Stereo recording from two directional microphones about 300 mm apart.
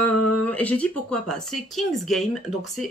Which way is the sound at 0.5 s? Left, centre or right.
Centre.